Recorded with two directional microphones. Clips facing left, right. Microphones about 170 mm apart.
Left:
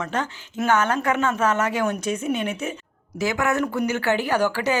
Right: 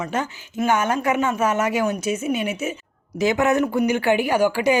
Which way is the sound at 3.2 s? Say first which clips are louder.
Right 4 dB; 20° right (ahead or behind).